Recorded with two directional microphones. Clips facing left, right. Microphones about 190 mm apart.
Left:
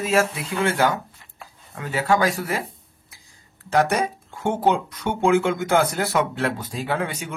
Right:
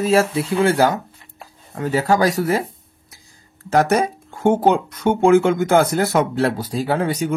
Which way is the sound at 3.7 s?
45° right (ahead or behind).